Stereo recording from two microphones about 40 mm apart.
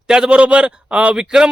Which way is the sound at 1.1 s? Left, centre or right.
Centre.